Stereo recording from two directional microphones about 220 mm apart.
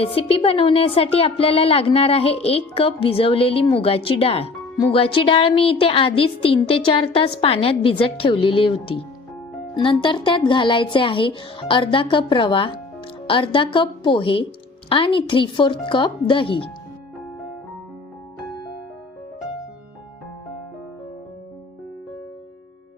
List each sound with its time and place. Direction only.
0.0 s a woman's voice: 25° left (ahead or behind)